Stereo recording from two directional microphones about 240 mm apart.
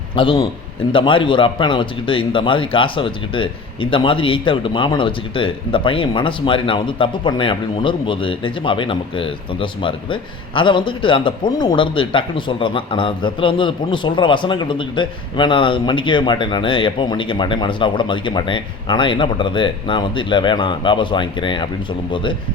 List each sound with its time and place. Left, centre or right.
0.2 s a man's voice: left